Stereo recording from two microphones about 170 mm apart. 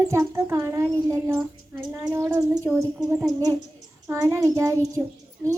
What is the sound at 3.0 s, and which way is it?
Speech, centre (ahead or behind).